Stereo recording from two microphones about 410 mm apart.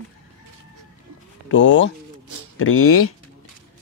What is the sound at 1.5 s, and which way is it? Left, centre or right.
A man's voice, left.